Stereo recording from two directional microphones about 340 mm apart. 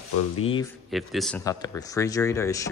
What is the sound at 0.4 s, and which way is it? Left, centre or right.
Speech, centre.